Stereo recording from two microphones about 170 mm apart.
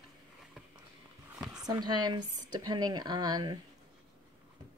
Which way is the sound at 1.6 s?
25° right (ahead or behind).